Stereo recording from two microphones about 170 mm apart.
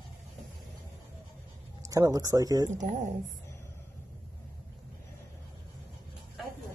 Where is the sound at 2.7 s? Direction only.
45° right (ahead or behind).